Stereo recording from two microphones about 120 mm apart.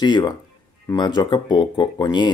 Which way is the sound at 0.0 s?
35° left (ahead or behind).